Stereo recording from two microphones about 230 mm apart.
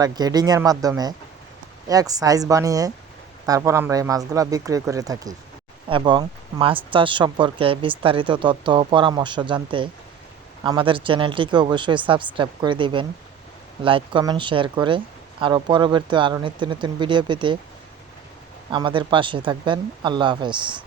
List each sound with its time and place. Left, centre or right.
0.0 s speech: centre
18.7 s speech: right